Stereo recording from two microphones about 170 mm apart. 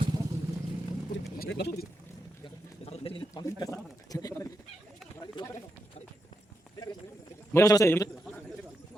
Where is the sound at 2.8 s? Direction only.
35° left (ahead or behind).